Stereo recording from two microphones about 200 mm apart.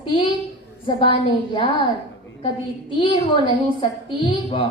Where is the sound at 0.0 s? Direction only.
25° left (ahead or behind).